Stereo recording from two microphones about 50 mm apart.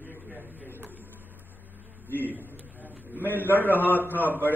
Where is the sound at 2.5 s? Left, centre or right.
Left.